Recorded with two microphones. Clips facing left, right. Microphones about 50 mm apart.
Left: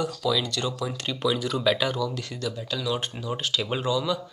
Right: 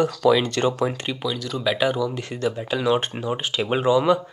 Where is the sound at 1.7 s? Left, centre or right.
Centre; by 3.3 s right.